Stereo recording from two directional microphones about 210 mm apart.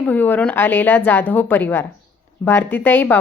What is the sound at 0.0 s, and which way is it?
A woman's voice, 10° left (ahead or behind).